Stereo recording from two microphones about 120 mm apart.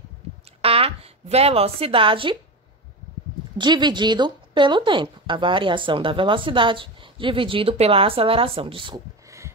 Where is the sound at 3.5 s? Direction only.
40° right (ahead or behind).